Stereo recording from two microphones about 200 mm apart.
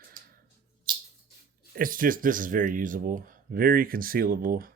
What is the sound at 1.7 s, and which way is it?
Speech, 45° right (ahead or behind).